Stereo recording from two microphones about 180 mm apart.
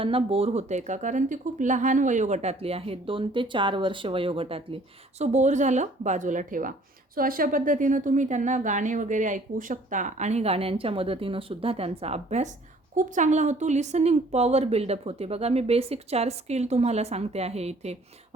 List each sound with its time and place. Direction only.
0.0 s a woman's voice: 30° right (ahead or behind)